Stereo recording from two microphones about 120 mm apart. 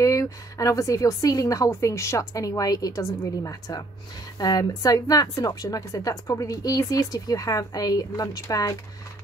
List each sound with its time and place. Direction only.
0.0 s speech: 25° left (ahead or behind)